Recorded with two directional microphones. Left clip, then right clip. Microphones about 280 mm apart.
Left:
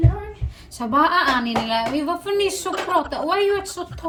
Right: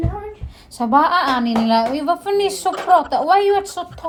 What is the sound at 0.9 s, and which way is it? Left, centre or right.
Speech, right.